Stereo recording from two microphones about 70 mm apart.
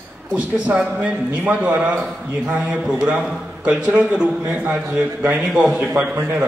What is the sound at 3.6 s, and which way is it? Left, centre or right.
A man's voice, centre.